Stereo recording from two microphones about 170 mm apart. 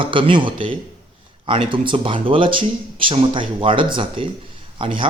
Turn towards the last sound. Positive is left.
turn(degrees=-30)  # may be behind; listen again after turning